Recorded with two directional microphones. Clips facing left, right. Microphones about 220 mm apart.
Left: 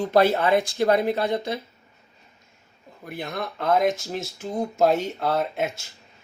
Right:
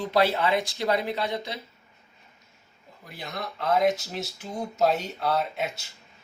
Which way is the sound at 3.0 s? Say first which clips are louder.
Left 5 dB; 55° left (ahead or behind).